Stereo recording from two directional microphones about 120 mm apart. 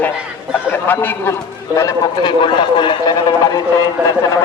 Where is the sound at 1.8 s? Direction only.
30° left (ahead or behind).